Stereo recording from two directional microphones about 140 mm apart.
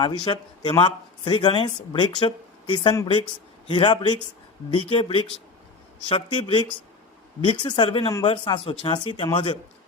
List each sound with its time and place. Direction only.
0.0 s speech: 35° left (ahead or behind)